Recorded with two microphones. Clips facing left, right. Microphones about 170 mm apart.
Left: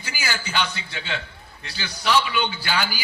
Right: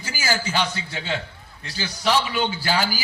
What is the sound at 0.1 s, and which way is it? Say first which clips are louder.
A man's voice: right 4 dB; 40° right (ahead or behind).